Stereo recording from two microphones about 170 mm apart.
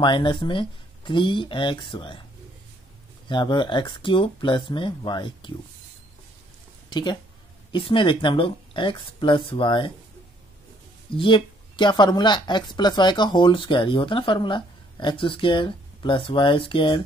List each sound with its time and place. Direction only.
0.0 s speech: 30° left (ahead or behind)
3.3 s speech: 25° left (ahead or behind)
6.9 s speech: 25° left (ahead or behind)
11.1 s speech: 30° left (ahead or behind)